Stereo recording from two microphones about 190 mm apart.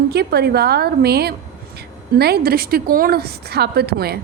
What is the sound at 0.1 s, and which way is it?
A woman's voice, 60° right (ahead or behind).